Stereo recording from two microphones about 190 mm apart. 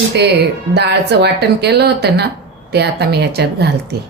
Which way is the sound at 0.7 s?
60° right (ahead or behind).